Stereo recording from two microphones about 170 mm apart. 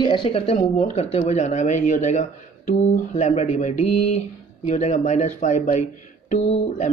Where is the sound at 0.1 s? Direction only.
30° left (ahead or behind).